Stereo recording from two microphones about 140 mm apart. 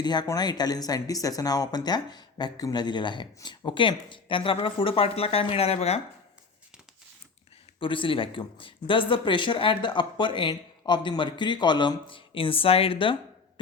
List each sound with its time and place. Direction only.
0.0 s speech: 30° left (ahead or behind); by 6.0 s 45° left (ahead or behind)
7.8 s speech: 40° left (ahead or behind)